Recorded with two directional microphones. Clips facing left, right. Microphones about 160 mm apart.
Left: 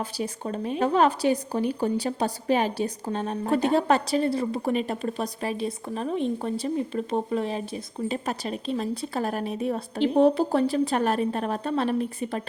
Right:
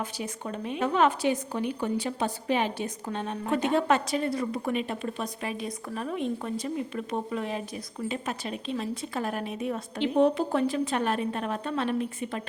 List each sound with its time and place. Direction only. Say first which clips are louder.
0.0 s a woman's voice: left 4 dB; 35° left (ahead or behind)